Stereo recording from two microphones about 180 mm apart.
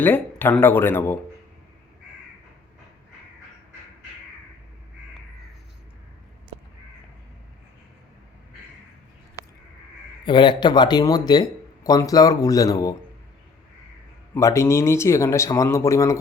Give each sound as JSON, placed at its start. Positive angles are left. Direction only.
{"t": 0.0, "sound": "speech", "side_deg": 10}
{"t": 10.2, "sound": "speech", "side_deg": 25}
{"t": 14.3, "sound": "speech", "side_deg": 15}